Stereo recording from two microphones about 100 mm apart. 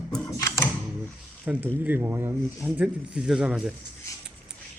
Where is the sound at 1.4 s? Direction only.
20° right (ahead or behind).